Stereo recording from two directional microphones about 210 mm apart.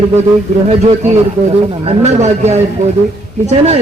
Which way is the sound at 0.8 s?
30° right (ahead or behind).